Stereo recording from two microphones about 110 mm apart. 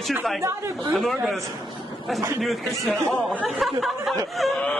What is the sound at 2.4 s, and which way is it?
Speech, centre (ahead or behind).